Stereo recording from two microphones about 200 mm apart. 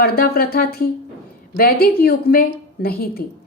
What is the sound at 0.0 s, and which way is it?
A woman's voice, 50° left (ahead or behind).